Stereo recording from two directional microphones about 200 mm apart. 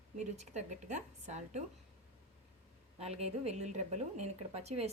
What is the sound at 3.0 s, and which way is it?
Speech, 30° right (ahead or behind).